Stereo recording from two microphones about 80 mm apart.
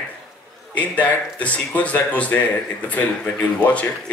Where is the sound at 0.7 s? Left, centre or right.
Centre.